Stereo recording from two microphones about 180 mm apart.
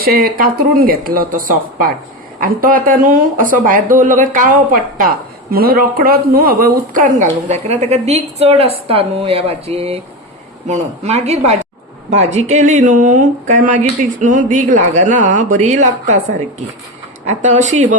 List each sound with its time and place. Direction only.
0.0 s a woman's voice: 55° right (ahead or behind)
17.2 s a woman's voice: 40° right (ahead or behind)